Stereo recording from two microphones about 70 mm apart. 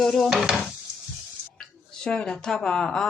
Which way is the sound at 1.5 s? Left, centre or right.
Centre.